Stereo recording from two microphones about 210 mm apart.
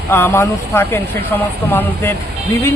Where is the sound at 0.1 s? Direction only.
10° left (ahead or behind).